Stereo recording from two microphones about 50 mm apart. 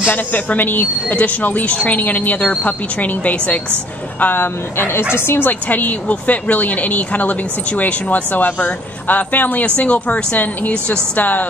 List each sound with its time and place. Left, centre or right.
0.0 s a woman's voice: left
4.2 s speech: left
5.5 s a woman's voice: left